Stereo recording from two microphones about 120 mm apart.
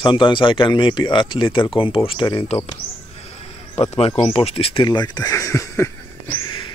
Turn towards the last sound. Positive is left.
turn(degrees=40)  # may be behind; listen again after turning